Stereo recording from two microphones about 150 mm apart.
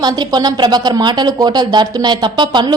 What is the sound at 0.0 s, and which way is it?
A woman's voice, 25° right (ahead or behind).